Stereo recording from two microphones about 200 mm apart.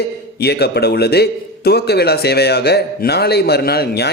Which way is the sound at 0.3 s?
55° left (ahead or behind).